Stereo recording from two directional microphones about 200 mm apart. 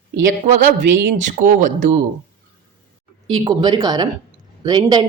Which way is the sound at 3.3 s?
25° right (ahead or behind).